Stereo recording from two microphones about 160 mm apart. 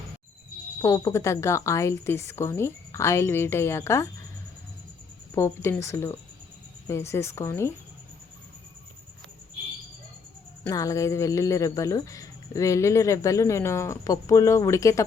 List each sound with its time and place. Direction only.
0.8 s a woman's voice: 20° left (ahead or behind)
5.3 s a woman's voice: 15° left (ahead or behind)
10.7 s speech: 20° left (ahead or behind)